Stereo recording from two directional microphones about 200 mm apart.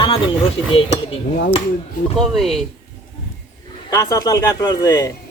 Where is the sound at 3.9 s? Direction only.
15° left (ahead or behind).